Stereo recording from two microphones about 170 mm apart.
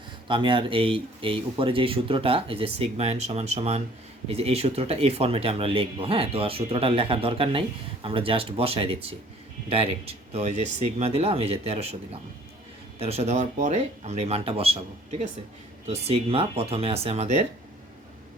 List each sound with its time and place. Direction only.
0.3 s speech: 30° right (ahead or behind)
13.0 s speech: 40° right (ahead or behind)